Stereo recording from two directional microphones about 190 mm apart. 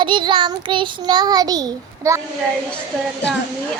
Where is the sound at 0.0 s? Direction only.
25° right (ahead or behind).